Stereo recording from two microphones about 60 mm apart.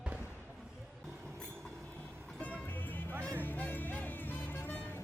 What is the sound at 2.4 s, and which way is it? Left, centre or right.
Music, left.